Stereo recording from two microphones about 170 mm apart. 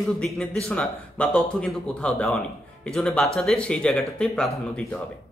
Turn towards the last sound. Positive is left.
turn(degrees=5)  # may be behind; listen again after turning